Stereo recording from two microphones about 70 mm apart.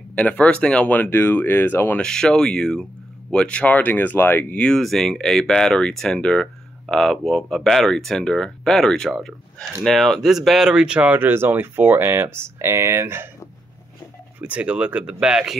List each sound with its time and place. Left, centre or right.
0.1 s speech: centre
2.0 s speech: centre; by 4.6 s left
4.6 s speech: centre
4.8 s speech: centre
11.1 s speech: right
14.4 s speech: centre